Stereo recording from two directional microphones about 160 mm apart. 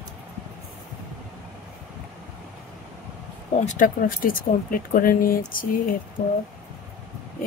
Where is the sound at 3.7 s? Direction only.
55° left (ahead or behind).